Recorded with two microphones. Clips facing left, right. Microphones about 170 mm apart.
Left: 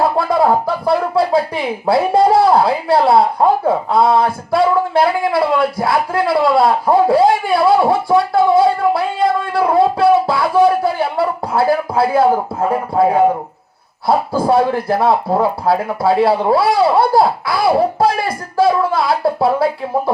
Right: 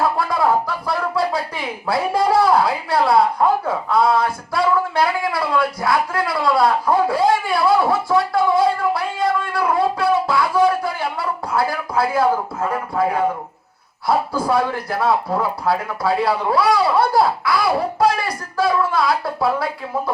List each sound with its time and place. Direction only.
0.0 s speech: 25° left (ahead or behind)